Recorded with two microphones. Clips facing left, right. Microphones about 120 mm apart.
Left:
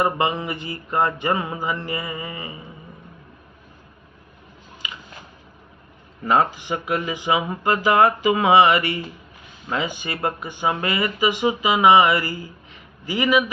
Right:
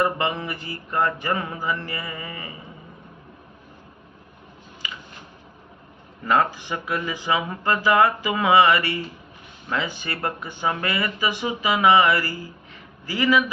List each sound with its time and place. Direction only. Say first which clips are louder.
0.0 s speech: left 2 dB; 20° left (ahead or behind)
6.2 s a man's voice: left 2 dB; 20° left (ahead or behind)